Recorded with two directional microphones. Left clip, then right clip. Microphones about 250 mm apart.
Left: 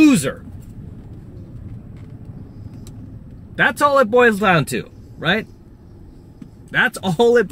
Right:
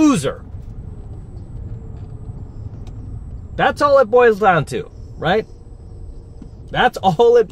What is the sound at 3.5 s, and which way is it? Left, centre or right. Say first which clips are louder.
Speech: right 2 dB; right.